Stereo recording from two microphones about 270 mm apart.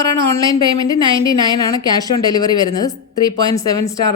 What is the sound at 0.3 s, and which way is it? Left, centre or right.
Speech, centre.